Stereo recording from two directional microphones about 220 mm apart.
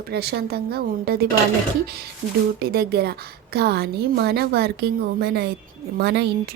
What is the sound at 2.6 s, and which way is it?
Speech, 45° right (ahead or behind).